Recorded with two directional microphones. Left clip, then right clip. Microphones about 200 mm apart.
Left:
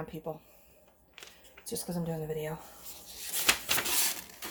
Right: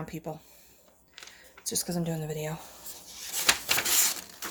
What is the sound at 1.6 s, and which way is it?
Speech, 45° right (ahead or behind).